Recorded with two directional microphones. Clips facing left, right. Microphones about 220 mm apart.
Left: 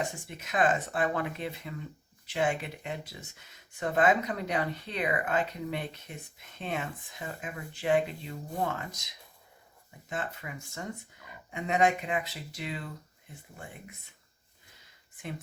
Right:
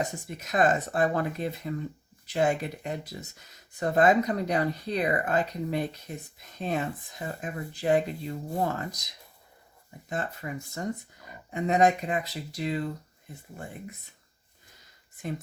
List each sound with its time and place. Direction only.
0.0 s speech: 40° right (ahead or behind)
10.1 s speech: 40° right (ahead or behind)